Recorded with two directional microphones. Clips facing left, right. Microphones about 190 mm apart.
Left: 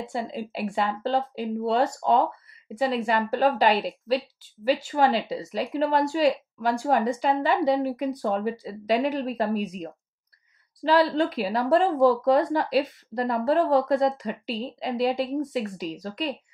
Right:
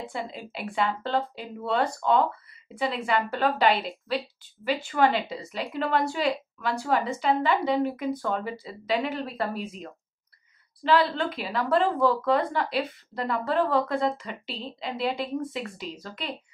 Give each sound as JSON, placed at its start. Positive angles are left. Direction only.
{"t": 0.1, "sound": "a woman's voice", "side_deg": 40}